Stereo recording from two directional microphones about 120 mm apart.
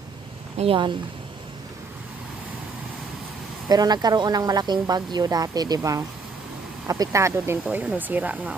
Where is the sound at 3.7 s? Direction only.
35° right (ahead or behind).